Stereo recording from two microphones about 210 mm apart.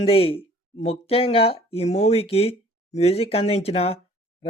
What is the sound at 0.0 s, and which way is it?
Speech, 25° left (ahead or behind).